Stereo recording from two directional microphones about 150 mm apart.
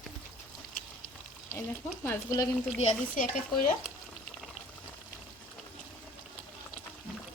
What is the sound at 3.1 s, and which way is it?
Speech, 65° left (ahead or behind).